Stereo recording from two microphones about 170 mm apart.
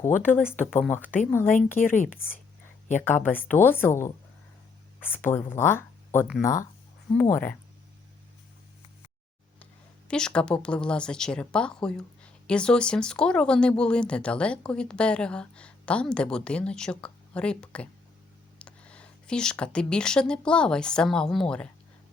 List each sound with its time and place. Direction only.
0.0 s a woman's voice: 10° left (ahead or behind)
2.9 s speech: 10° left (ahead or behind)
10.1 s a woman's voice: 5° left (ahead or behind)